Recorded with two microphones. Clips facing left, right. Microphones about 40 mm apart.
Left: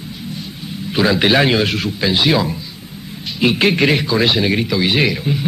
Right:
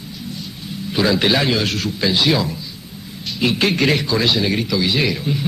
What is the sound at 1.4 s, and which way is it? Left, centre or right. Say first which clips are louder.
Speech: left 4 dB; left.